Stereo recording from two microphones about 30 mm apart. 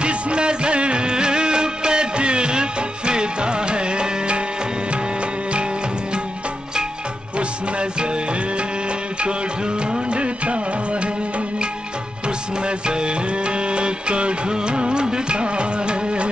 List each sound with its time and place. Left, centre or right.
0.0 s music: right
7.3 s music: right
10.1 s music: right
12.6 s music: right